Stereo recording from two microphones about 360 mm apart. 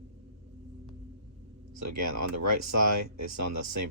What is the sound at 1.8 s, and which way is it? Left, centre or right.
Speech, right.